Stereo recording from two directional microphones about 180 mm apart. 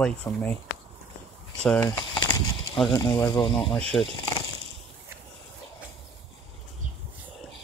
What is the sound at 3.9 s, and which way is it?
Speech, 5° left (ahead or behind).